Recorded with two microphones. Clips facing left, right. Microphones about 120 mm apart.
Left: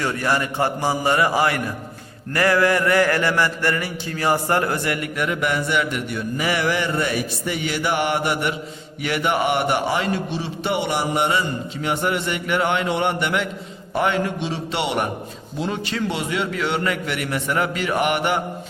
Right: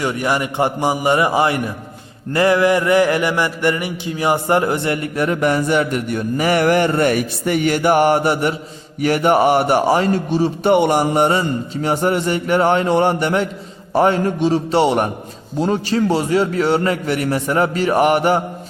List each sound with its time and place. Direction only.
0.0 s a man's voice: 15° right (ahead or behind)
2.3 s mantra: 20° right (ahead or behind); by 18.4 s 35° right (ahead or behind)